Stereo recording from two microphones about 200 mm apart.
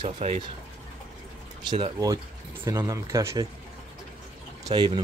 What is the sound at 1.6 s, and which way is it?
Speech, 25° right (ahead or behind).